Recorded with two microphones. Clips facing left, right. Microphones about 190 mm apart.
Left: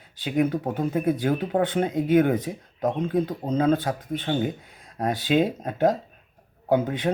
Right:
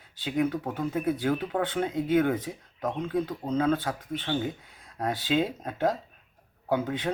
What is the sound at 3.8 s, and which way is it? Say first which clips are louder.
Speech: left 4 dB; 40° left (ahead or behind).